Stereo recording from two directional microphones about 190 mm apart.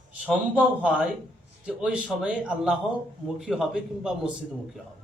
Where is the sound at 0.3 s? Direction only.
5° right (ahead or behind).